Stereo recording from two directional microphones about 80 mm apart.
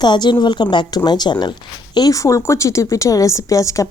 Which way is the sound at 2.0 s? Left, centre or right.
Left.